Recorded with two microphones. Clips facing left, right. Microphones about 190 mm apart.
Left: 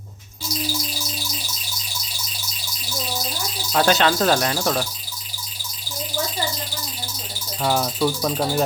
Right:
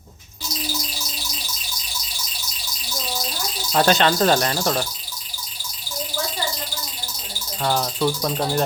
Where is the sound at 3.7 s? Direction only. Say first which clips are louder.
Even; centre (ahead or behind).